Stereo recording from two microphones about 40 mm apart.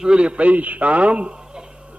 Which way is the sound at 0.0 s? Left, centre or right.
Right.